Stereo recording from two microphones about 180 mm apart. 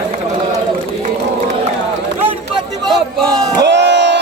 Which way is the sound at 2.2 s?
5° right (ahead or behind).